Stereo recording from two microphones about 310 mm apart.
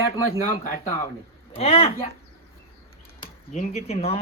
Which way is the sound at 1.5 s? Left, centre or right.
Centre.